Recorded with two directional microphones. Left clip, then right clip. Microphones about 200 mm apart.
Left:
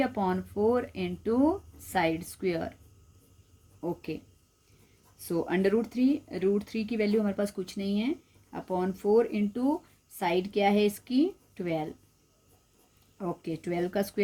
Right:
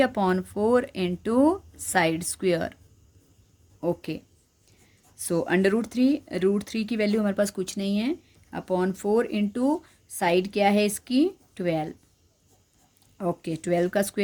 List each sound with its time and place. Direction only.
0.0 s speech: 40° right (ahead or behind)
3.8 s speech: 45° right (ahead or behind)
5.2 s speech: 40° right (ahead or behind)
13.1 s speech: 40° right (ahead or behind)